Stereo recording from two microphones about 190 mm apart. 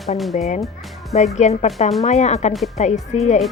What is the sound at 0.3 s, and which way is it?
A woman's voice, 35° left (ahead or behind).